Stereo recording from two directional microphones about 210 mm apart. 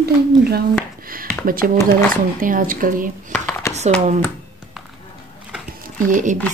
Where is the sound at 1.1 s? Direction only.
40° right (ahead or behind).